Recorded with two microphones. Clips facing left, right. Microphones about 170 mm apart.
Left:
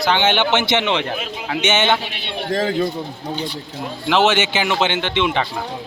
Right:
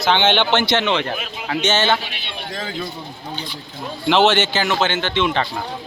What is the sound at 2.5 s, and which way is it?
Speech, 50° left (ahead or behind).